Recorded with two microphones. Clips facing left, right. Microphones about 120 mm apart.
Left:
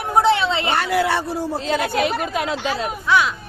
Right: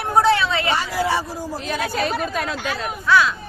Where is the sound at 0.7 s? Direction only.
65° left (ahead or behind).